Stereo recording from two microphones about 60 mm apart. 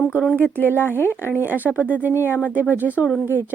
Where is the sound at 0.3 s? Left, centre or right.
Left.